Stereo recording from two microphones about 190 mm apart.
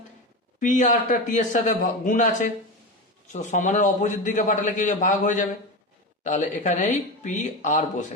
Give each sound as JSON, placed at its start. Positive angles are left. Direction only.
{"t": 0.6, "sound": "a man's voice", "side_deg": 40}